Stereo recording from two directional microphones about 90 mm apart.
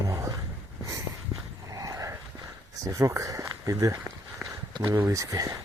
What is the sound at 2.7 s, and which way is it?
Speech, 40° right (ahead or behind).